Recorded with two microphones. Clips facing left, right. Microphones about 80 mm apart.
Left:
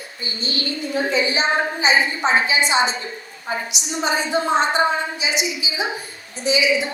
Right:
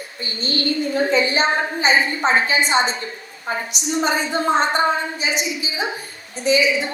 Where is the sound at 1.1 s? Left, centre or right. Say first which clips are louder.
Even; right.